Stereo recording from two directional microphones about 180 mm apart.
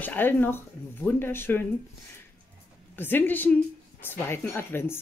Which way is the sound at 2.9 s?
10° left (ahead or behind).